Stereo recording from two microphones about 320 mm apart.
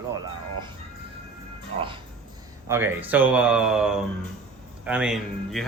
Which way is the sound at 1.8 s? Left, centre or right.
Centre.